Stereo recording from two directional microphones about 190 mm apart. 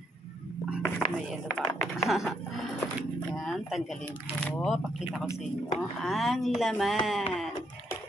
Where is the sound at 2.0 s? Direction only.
Centre (ahead or behind).